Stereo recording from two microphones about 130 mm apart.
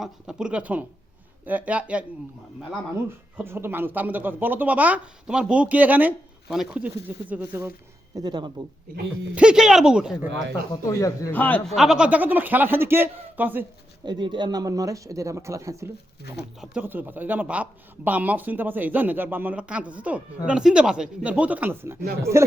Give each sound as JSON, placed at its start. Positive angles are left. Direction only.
{"t": 0.0, "sound": "speech", "side_deg": -5}
{"t": 3.3, "sound": "speech", "side_deg": -15}
{"t": 8.1, "sound": "speech", "side_deg": -35}
{"t": 9.3, "sound": "speech", "side_deg": -10}
{"t": 10.8, "sound": "a man's voice", "side_deg": 25}
{"t": 11.3, "sound": "a man's voice", "side_deg": 15}
{"t": 11.7, "sound": "speech", "side_deg": 0}
{"t": 14.0, "sound": "speech", "side_deg": -35}